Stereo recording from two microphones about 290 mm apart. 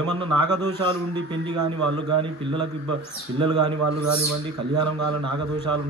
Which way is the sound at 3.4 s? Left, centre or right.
Right.